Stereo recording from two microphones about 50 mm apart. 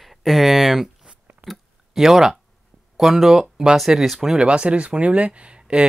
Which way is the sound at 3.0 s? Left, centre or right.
Centre.